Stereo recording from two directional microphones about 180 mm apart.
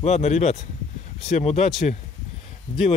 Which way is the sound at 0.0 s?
40° left (ahead or behind).